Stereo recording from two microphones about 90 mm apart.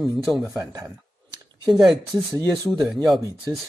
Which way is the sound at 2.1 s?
35° right (ahead or behind).